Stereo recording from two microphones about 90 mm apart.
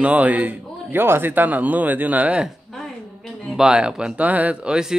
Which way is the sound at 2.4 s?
5° left (ahead or behind).